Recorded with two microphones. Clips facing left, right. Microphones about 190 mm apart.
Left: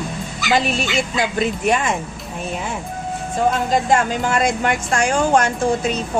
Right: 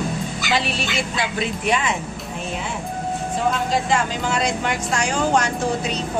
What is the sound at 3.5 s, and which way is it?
Speech, 50° left (ahead or behind).